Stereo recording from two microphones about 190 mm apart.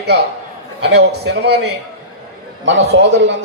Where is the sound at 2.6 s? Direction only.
70° right (ahead or behind).